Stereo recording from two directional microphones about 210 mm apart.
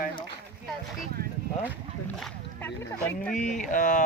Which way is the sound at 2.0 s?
5° left (ahead or behind).